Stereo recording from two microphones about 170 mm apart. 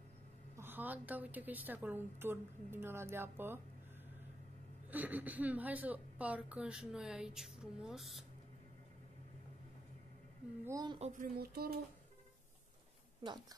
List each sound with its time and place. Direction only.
0.6 s a woman's voice: 10° right (ahead or behind)
4.9 s a woman's voice: 10° right (ahead or behind)
10.6 s a woman's voice: 20° right (ahead or behind)
11.0 s speech: 50° right (ahead or behind)
13.2 s a woman's voice: 25° right (ahead or behind)